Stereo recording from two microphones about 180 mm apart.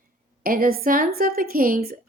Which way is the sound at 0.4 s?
55° right (ahead or behind).